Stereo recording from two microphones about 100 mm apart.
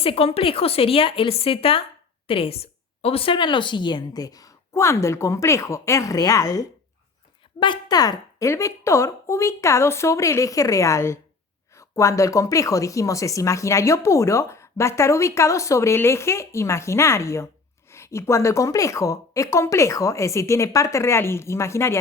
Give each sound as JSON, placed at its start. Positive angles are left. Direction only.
{"t": 0.0, "sound": "a woman's voice", "side_deg": 75}
{"t": 7.6, "sound": "a woman's voice", "side_deg": 45}